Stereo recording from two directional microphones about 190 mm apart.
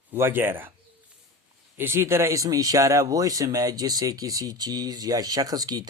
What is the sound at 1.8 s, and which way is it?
Speech, 10° right (ahead or behind).